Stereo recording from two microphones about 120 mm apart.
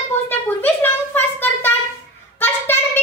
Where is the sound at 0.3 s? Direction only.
15° left (ahead or behind).